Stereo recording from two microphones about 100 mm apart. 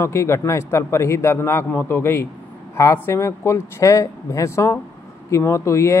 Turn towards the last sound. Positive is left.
turn(degrees=30)  # may be behind; listen again after turning